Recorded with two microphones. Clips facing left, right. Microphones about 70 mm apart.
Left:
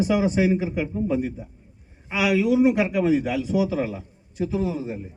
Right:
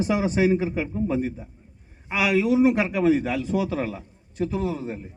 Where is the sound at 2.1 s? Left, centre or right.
Right.